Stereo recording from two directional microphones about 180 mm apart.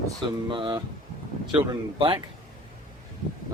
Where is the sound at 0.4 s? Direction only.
25° right (ahead or behind).